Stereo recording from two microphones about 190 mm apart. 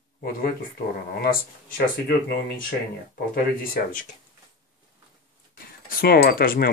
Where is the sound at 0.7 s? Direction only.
50° left (ahead or behind).